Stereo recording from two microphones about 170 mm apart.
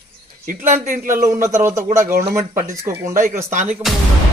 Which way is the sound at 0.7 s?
50° right (ahead or behind).